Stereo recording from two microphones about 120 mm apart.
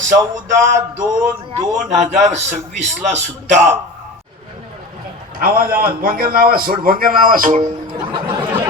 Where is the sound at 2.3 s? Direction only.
75° right (ahead or behind).